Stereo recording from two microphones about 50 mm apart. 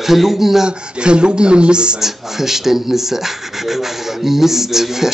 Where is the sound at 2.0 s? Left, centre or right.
Centre.